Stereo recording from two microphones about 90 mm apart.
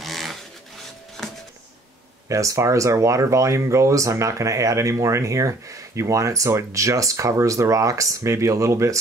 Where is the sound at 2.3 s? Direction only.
35° right (ahead or behind).